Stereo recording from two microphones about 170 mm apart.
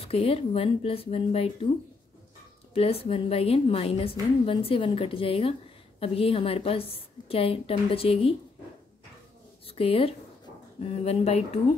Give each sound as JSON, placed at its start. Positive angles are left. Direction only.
{"t": 0.0, "sound": "a woman's voice", "side_deg": 35}
{"t": 2.7, "sound": "a woman's voice", "side_deg": 35}
{"t": 9.8, "sound": "a woman's voice", "side_deg": 35}